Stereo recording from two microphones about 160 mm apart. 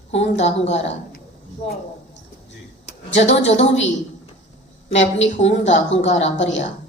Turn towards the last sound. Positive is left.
turn(degrees=45)  # may be behind; listen again after turning